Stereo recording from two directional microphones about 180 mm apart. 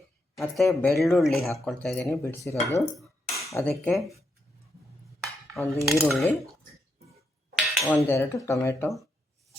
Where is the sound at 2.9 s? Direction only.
Centre (ahead or behind).